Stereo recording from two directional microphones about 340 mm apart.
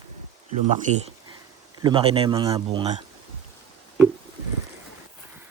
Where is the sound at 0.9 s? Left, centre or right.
Right.